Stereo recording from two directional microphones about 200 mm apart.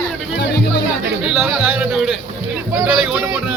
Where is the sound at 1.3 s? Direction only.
5° right (ahead or behind).